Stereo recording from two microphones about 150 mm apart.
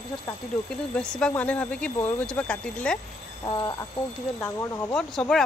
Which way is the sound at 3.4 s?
25° left (ahead or behind).